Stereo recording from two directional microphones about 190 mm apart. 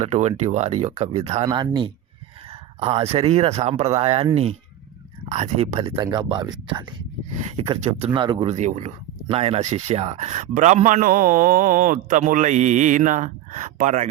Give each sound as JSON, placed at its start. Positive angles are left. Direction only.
{"t": 0.0, "sound": "speech", "side_deg": -35}
{"t": 1.5, "sound": "speech", "side_deg": -20}
{"t": 5.3, "sound": "speech", "side_deg": -30}
{"t": 7.9, "sound": "speech", "side_deg": -35}
{"t": 8.4, "sound": "speech", "side_deg": -35}